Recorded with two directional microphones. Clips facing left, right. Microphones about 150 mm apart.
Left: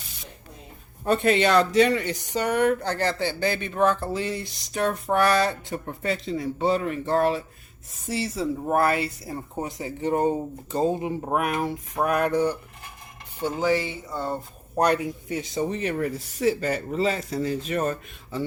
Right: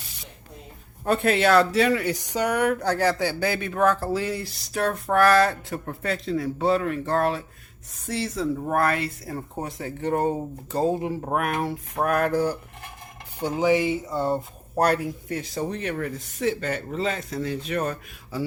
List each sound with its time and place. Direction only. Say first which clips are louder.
1.0 s speech: even; centre (ahead or behind)
13.4 s speech: right 2 dB; 15° right (ahead or behind)
14.8 s speech: even; 5° right (ahead or behind)